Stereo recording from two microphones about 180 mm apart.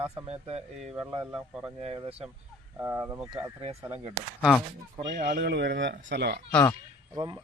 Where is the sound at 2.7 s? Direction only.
15° right (ahead or behind).